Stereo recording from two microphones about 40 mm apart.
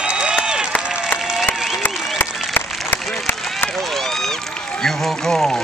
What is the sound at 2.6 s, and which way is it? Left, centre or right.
Applause, left.